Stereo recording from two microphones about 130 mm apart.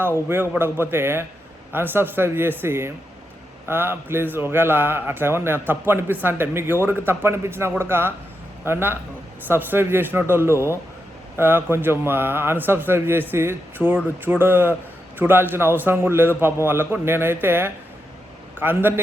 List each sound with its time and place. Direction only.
0.0 s a man's voice: 15° right (ahead or behind)